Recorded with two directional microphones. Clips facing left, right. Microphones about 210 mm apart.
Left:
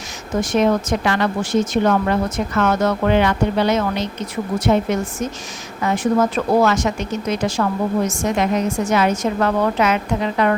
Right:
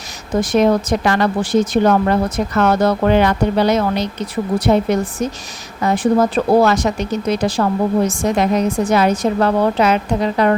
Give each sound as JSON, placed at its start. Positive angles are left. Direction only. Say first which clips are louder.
{"t": 0.3, "sound": "speech", "louder": "right 3 dB", "side_deg": -35}